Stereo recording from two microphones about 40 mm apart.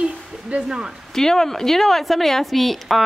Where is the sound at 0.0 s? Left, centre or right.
Right.